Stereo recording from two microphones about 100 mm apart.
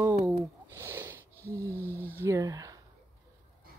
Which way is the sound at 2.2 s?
35° right (ahead or behind).